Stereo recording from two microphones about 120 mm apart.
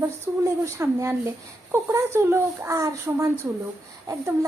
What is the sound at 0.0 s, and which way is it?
A child's voice, 25° right (ahead or behind).